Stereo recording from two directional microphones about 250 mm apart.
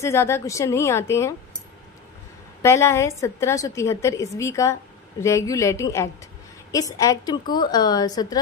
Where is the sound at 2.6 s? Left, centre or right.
Centre.